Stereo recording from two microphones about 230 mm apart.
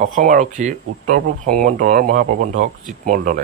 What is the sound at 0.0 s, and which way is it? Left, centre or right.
Speech, right.